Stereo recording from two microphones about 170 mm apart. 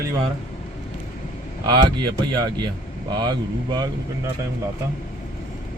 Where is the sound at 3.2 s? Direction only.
25° right (ahead or behind).